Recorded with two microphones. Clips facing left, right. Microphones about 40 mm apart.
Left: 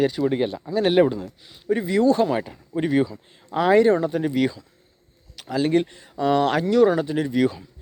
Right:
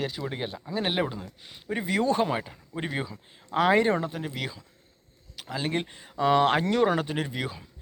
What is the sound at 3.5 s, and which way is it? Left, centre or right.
Speech, right.